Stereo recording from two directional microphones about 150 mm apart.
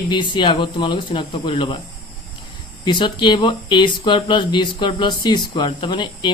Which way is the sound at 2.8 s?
30° left (ahead or behind).